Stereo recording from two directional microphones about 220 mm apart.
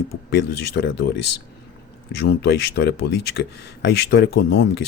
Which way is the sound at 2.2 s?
50° left (ahead or behind).